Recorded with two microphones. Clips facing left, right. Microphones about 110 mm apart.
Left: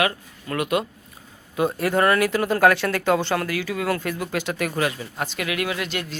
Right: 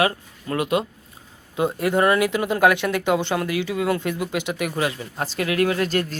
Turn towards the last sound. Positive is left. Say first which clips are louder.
# right 6 dB
turn(degrees=-40)  # may be behind; listen again after turning